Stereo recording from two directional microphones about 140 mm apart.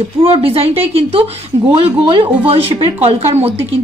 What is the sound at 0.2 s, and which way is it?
A woman's voice, 45° right (ahead or behind).